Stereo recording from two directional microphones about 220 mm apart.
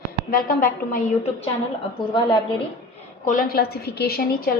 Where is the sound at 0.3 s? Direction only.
40° left (ahead or behind).